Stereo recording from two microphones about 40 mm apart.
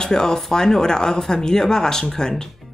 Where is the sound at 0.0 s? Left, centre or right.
Centre.